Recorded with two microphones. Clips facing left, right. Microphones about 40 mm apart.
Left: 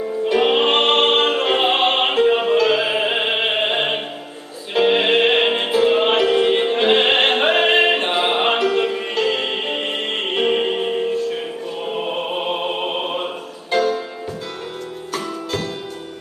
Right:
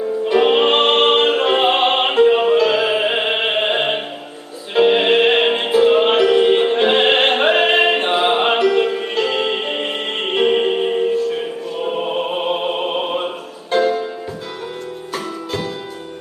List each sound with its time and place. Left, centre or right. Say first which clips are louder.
0.3 s music: right 2 dB; centre
13.7 s music: right 2 dB; centre